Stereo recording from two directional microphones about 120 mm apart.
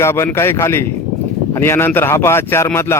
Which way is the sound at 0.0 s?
20° left (ahead or behind).